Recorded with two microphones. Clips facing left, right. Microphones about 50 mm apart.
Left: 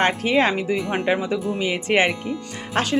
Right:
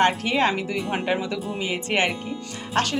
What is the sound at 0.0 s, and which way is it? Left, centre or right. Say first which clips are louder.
Speech: left 1 dB; left.